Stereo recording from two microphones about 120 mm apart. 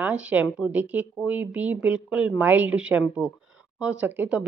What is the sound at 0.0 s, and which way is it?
Speech, 10° right (ahead or behind).